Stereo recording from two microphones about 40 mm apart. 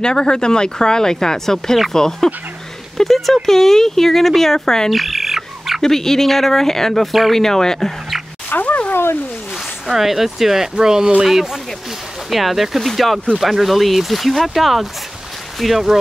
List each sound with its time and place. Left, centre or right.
0.0 s speech: centre
4.9 s bird: centre
5.8 s speech: centre
7.1 s speech: centre
7.3 s speech: centre
8.5 s a sound: left
9.8 s speech: centre